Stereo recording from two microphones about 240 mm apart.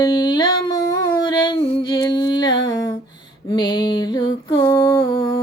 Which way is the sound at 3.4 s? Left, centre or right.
Centre.